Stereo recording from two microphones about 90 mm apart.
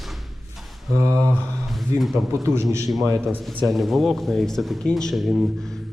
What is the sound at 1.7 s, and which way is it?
Speech, centre (ahead or behind).